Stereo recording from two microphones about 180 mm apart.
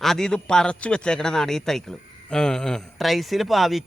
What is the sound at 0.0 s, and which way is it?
A man's voice, 5° left (ahead or behind).